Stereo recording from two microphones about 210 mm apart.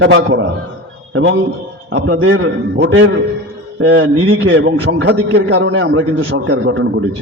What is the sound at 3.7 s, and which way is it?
Speech, 70° right (ahead or behind).